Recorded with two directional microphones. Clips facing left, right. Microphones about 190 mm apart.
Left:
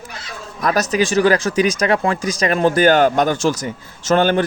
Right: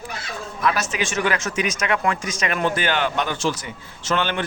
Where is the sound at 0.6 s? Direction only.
40° left (ahead or behind).